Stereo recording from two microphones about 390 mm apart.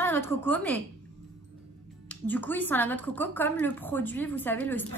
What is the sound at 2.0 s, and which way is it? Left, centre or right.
Speech, centre.